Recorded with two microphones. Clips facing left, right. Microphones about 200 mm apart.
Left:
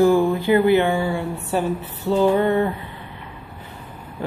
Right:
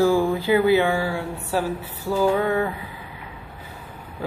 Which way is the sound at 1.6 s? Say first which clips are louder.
Left 2 dB; 20° left (ahead or behind).